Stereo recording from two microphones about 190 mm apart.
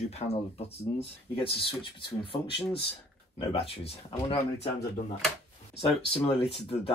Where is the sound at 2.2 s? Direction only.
30° left (ahead or behind).